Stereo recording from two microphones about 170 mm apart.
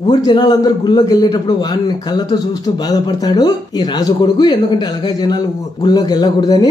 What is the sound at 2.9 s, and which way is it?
Speech, 25° left (ahead or behind).